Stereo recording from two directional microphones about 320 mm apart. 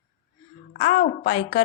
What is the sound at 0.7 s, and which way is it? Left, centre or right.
Speech, left.